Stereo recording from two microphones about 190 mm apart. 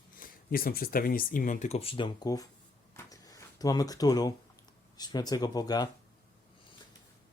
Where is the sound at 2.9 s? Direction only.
15° left (ahead or behind).